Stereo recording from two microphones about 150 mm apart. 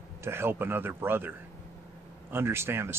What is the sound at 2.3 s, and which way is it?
Speech, 15° right (ahead or behind).